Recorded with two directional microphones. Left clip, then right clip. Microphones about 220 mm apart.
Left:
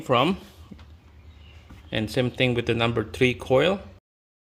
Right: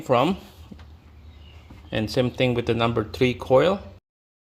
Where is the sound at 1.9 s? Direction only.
Centre (ahead or behind).